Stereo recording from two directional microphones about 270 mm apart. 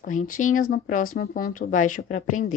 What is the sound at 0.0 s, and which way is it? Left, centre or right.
Speech, left.